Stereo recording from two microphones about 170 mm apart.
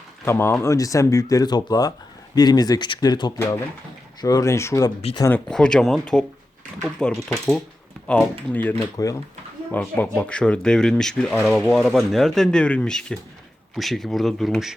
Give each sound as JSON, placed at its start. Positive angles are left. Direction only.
{"t": 0.3, "sound": "speech", "side_deg": 15}
{"t": 5.5, "sound": "speech", "side_deg": 5}
{"t": 8.8, "sound": "speech", "side_deg": 20}